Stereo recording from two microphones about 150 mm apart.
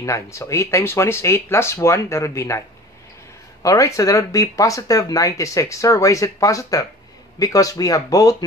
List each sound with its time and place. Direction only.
0.0 s speech: 20° left (ahead or behind)
3.6 s speech: 20° left (ahead or behind)